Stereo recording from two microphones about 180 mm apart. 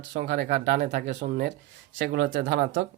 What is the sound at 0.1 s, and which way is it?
Speech, 55° right (ahead or behind).